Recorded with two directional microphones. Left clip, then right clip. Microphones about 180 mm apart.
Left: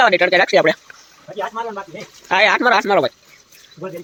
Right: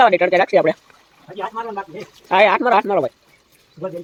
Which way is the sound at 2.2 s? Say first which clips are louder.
Even; centre (ahead or behind).